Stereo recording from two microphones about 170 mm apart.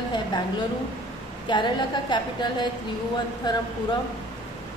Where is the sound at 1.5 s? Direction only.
25° left (ahead or behind).